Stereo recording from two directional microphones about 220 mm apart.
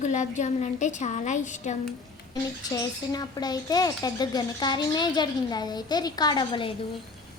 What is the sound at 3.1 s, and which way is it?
A woman's voice, 20° left (ahead or behind).